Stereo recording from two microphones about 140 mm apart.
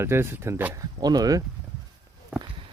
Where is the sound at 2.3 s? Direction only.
10° right (ahead or behind).